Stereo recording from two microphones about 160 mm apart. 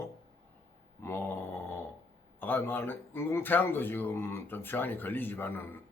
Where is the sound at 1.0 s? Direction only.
15° left (ahead or behind).